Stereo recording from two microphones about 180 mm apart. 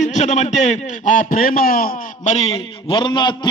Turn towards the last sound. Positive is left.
turn(degrees=25)  # may be behind; listen again after turning